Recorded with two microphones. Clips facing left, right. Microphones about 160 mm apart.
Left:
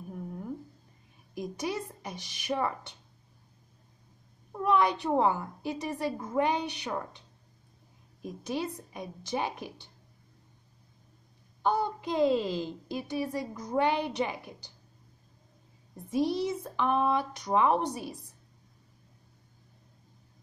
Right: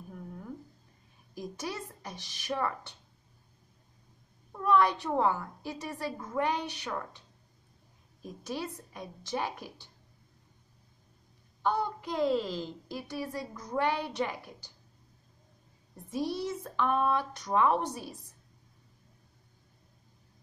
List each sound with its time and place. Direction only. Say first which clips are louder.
0.1 s a sound: left 5 dB; 15° left (ahead or behind)
1.3 s a woman's voice: left 4 dB; 15° left (ahead or behind)
4.5 s a child's voice: even; 15° left (ahead or behind)
8.2 s a woman's voice: left 4 dB; 15° left (ahead or behind)
12.3 s a woman's voice: left 2 dB; 10° left (ahead or behind)
16.1 s a woman's voice: left 5 dB; 15° left (ahead or behind)